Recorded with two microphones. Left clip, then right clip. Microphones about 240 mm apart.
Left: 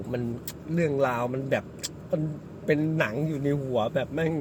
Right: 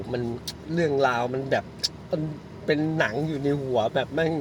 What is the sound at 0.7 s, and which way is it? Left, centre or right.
Speech, centre.